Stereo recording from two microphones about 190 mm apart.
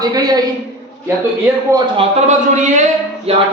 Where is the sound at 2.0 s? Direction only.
35° right (ahead or behind).